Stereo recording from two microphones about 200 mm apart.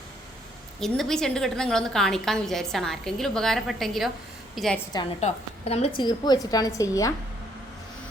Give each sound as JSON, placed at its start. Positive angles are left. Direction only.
{"t": 0.8, "sound": "a woman's voice", "side_deg": 0}
{"t": 5.2, "sound": "a woman's voice", "side_deg": 30}
{"t": 6.0, "sound": "a woman's voice", "side_deg": 20}